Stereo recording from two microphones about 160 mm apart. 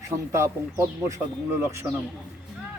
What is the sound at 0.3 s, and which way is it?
A man's voice, 15° right (ahead or behind).